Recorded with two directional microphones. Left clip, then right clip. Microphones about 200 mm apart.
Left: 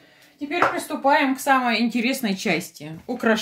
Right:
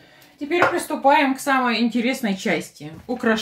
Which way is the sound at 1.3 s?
40° left (ahead or behind).